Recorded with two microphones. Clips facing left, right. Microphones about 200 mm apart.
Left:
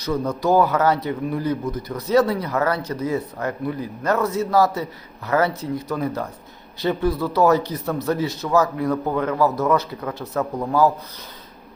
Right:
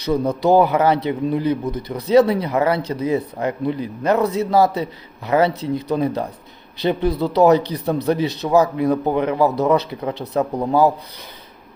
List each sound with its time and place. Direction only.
0.4 s speech: 20° right (ahead or behind)